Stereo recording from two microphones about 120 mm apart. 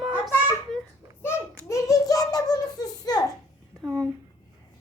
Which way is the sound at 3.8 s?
30° right (ahead or behind).